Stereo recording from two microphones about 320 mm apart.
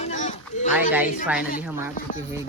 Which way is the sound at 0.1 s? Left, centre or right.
Left.